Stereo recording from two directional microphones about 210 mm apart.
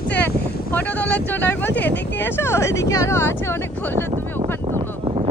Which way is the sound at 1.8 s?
55° left (ahead or behind).